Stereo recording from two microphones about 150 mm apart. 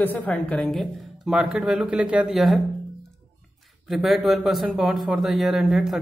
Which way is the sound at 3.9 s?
Centre (ahead or behind).